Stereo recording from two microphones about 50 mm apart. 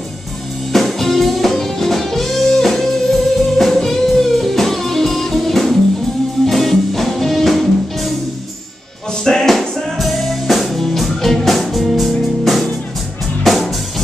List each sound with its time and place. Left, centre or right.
0.7 s music: centre
9.2 s music: centre